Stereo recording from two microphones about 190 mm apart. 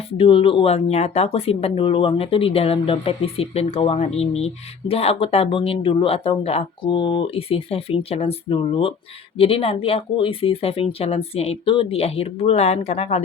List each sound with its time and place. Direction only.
0.1 s speech: 30° left (ahead or behind)